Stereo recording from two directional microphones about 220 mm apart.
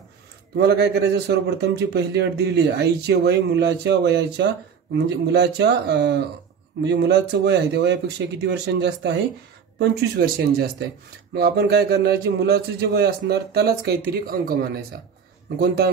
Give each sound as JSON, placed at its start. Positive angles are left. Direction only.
{"t": 0.6, "sound": "a man's voice", "side_deg": -50}